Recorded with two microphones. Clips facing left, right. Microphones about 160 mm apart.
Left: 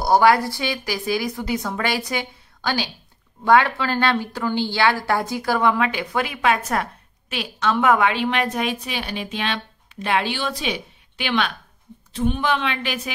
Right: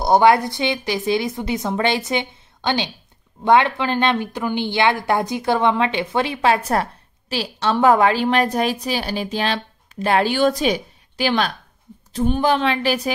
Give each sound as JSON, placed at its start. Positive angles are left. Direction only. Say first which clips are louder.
{"t": 0.0, "sound": "a woman's voice", "louder": "right 2 dB", "side_deg": -20}